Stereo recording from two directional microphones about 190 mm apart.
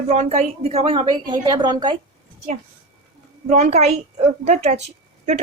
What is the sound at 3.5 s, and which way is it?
Speech, 35° right (ahead or behind).